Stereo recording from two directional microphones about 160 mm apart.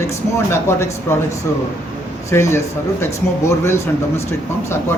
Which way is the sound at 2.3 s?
15° left (ahead or behind).